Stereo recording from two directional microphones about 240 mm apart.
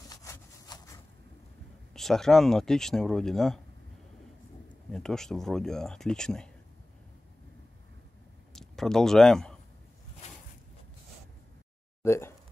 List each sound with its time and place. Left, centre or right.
0.1 s wood: centre
2.0 s speech: centre
4.9 s speech: centre
8.5 s speech: centre
10.2 s a sound: left
12.0 s speech: centre